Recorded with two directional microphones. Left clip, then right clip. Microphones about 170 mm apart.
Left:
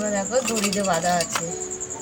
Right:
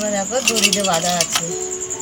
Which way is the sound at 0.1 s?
15° right (ahead or behind).